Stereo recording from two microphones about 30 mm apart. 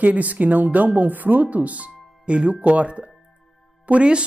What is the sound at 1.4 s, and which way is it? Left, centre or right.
Speech, right.